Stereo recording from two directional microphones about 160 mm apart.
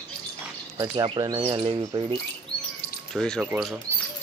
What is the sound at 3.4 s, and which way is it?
Speech, 5° right (ahead or behind).